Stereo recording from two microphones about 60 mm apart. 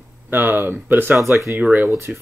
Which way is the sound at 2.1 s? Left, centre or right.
Centre.